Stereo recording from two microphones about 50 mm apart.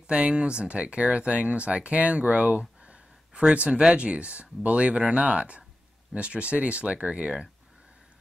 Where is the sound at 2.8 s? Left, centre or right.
Right.